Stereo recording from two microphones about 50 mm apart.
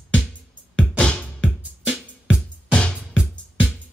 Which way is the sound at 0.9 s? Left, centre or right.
Left.